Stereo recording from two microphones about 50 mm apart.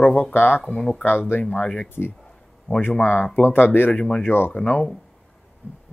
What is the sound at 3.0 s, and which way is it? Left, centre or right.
Speech, left.